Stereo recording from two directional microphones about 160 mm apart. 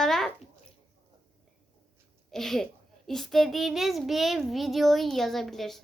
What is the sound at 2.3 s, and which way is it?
A child's voice, centre (ahead or behind).